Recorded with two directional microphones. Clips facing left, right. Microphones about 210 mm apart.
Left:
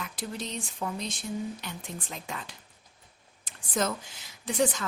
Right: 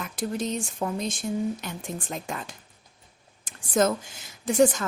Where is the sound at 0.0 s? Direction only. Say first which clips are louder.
Right 7 dB; 45° right (ahead or behind).